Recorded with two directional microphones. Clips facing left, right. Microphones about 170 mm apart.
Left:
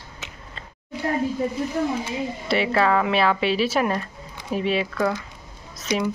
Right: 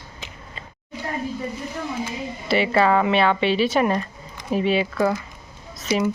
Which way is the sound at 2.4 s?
Centre (ahead or behind).